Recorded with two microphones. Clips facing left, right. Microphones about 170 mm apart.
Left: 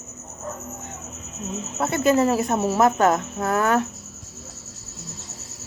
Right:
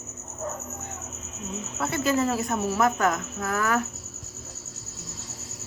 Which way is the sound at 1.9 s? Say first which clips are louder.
Left 6 dB; 55° left (ahead or behind).